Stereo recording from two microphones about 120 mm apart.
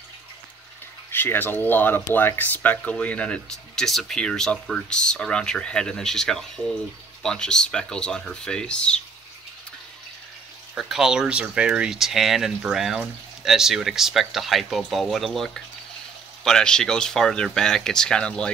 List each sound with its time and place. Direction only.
1.1 s speech: 15° left (ahead or behind)
10.7 s speech: 5° right (ahead or behind)